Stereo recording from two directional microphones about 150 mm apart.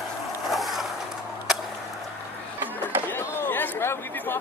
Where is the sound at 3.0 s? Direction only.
15° left (ahead or behind).